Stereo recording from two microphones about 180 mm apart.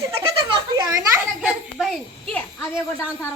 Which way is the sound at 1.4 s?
Centre (ahead or behind).